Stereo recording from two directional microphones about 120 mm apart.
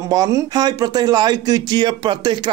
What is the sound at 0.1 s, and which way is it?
Speech, 30° right (ahead or behind).